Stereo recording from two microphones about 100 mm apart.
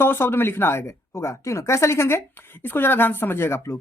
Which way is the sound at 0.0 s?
25° left (ahead or behind).